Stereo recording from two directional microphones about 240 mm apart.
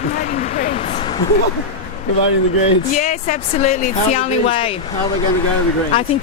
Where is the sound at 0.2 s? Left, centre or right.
Left.